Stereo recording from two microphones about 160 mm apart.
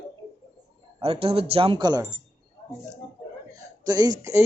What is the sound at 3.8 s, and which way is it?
Speech, 25° right (ahead or behind).